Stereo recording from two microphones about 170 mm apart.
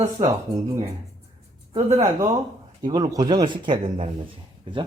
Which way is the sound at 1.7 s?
40° right (ahead or behind).